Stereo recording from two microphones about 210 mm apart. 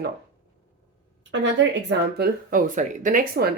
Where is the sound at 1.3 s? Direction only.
55° right (ahead or behind).